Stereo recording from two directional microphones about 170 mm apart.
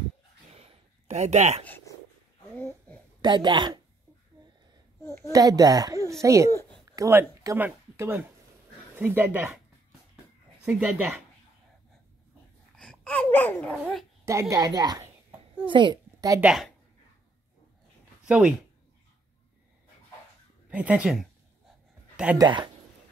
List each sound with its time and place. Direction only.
0.5 s a sound: 40° right (ahead or behind)
1.6 s speech: 10° left (ahead or behind)
2.5 s babbling: 10° left (ahead or behind)
3.2 s speech: 25° right (ahead or behind)
5.0 s a child's voice: 15° left (ahead or behind)
5.3 s a woman's voice: 20° right (ahead or behind)
10.6 s speech: 5° right (ahead or behind)
12.7 s speech: 5° left (ahead or behind)
14.2 s a woman's voice: 15° right (ahead or behind)
16.3 s a woman's voice: 5° right (ahead or behind)
18.2 s speech: 5° right (ahead or behind)
20.7 s speech: 10° right (ahead or behind)
22.1 s a sound: 10° right (ahead or behind)
22.4 s a woman's voice: 25° right (ahead or behind)